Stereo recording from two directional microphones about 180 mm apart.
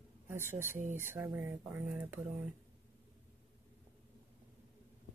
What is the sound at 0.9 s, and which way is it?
Speech, 10° right (ahead or behind).